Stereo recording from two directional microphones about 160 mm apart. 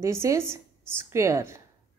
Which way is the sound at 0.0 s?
20° right (ahead or behind).